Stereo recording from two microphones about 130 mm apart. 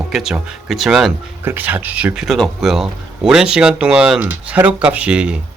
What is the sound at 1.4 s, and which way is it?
Speech, 15° right (ahead or behind).